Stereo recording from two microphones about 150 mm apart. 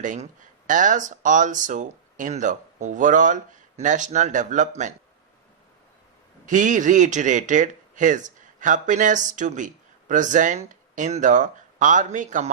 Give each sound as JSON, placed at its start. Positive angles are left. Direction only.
{"t": 0.0, "sound": "speech", "side_deg": -60}
{"t": 6.4, "sound": "speech", "side_deg": -55}